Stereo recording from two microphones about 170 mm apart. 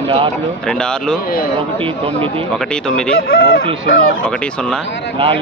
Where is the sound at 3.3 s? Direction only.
65° left (ahead or behind).